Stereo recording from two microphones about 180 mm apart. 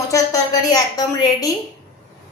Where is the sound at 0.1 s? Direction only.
20° left (ahead or behind).